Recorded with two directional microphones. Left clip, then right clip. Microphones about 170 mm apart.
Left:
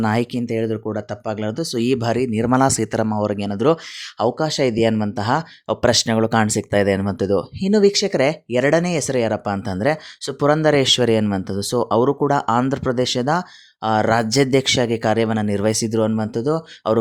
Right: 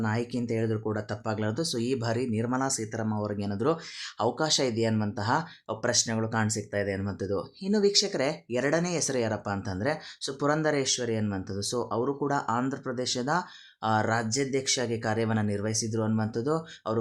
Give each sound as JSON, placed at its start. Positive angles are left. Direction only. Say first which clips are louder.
{"t": 0.0, "sound": "speech", "louder": "left 10 dB", "side_deg": 55}